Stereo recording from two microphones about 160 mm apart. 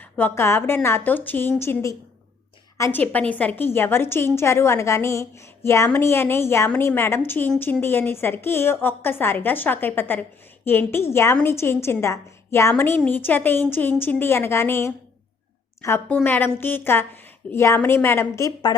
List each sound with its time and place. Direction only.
0.0 s a woman's voice: 10° left (ahead or behind)